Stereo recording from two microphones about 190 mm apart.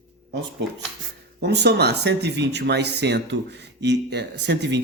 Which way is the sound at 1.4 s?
60° right (ahead or behind).